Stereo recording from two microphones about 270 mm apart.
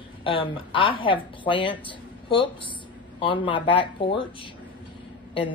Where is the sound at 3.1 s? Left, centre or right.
Centre.